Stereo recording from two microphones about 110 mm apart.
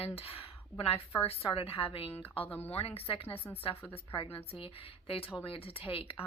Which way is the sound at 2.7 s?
60° left (ahead or behind).